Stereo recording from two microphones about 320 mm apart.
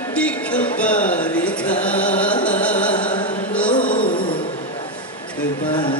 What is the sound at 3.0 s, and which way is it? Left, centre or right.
Chant, left.